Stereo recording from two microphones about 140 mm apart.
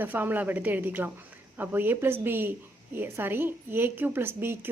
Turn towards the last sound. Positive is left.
turn(degrees=-15)  # may be behind; listen again after turning